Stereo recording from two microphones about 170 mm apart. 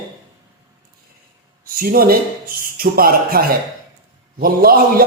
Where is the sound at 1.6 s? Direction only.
60° right (ahead or behind).